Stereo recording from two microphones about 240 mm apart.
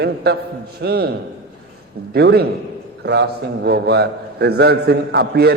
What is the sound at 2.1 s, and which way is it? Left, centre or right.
A man's voice, right.